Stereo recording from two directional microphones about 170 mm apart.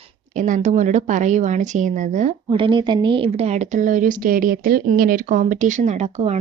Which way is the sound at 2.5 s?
30° right (ahead or behind).